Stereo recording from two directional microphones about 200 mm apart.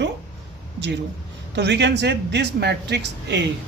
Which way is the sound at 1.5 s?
60° right (ahead or behind).